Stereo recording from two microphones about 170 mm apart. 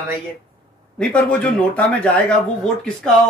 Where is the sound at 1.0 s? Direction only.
5° left (ahead or behind).